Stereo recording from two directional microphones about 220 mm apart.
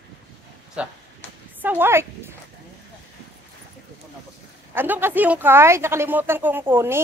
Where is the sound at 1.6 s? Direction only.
10° right (ahead or behind).